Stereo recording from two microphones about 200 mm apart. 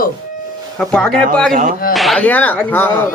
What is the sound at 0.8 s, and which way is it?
Speech, 5° left (ahead or behind).